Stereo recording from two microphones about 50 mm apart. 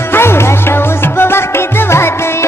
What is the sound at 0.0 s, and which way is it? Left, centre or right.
Music, left.